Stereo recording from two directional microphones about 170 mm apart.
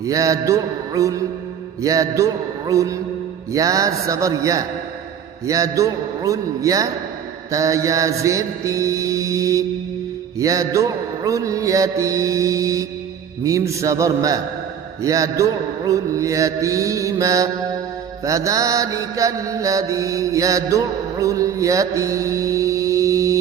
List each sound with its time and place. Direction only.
0.0 s music: 20° right (ahead or behind)
18.3 s mantra: 20° right (ahead or behind)